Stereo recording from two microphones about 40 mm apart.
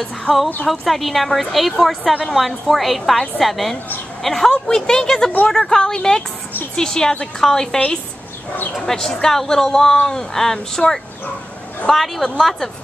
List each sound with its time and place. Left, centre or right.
0.3 s a woman's voice: centre
8.8 s a woman's voice: centre